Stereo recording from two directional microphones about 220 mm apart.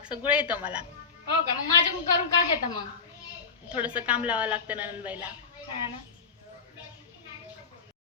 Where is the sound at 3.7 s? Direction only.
5° right (ahead or behind).